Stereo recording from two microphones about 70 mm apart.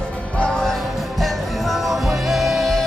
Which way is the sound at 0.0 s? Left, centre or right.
Centre.